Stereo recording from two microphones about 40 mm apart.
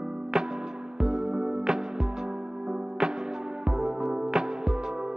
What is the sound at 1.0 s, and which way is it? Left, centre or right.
Music, centre.